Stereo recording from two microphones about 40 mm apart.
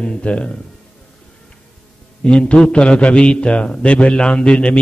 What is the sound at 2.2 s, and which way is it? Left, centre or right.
A man's voice, left.